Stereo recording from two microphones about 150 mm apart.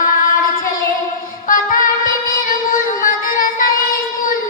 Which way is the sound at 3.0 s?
65° left (ahead or behind).